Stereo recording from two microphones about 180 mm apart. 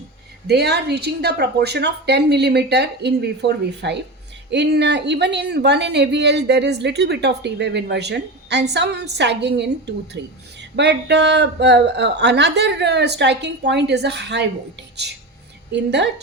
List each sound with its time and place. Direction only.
0.4 s a woman's voice: 65° right (ahead or behind)
15.7 s speech: 70° right (ahead or behind)